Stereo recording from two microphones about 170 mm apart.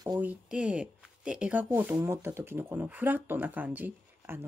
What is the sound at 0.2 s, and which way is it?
Speech, 5° right (ahead or behind).